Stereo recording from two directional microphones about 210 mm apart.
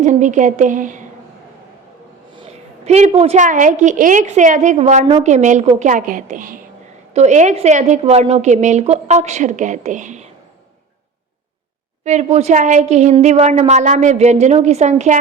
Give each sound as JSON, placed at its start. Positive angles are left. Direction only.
{"t": 0.0, "sound": "a woman's voice", "side_deg": -35}
{"t": 2.8, "sound": "a woman's voice", "side_deg": -30}
{"t": 12.0, "sound": "a woman's voice", "side_deg": -30}